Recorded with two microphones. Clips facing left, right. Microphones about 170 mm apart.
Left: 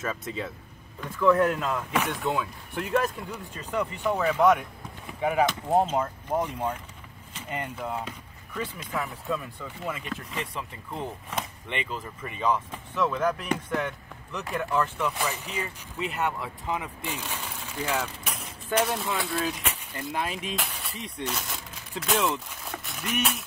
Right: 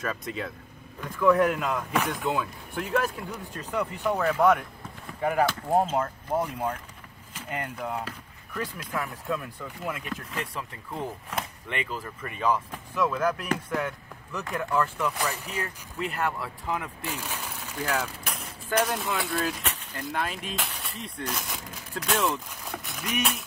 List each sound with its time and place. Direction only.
0.0 s speech: centre (ahead or behind)
1.8 s speech: 5° left (ahead or behind)
3.5 s speech: 10° right (ahead or behind)
4.5 s speech: 5° left (ahead or behind)
7.3 s vehicle: 10° right (ahead or behind)
7.7 s speech: centre (ahead or behind)
17.4 s a sound: 10° right (ahead or behind)
17.6 s speech: 10° left (ahead or behind)